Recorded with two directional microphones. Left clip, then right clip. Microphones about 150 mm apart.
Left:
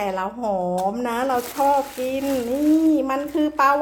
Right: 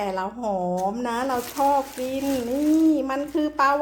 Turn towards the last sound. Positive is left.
turn(degrees=0)  # may be behind; listen again after turning